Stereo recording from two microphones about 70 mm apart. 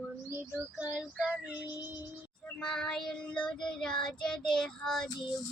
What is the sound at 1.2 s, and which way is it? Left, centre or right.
Speech, centre.